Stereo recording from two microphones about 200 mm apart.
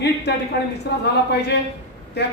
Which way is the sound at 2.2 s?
55° left (ahead or behind).